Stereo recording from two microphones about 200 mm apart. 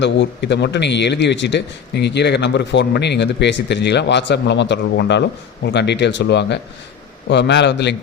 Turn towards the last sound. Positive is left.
turn(degrees=60)  # may be behind; listen again after turning